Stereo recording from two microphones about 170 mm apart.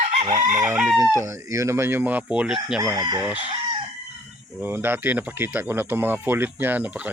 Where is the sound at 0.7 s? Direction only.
5° right (ahead or behind).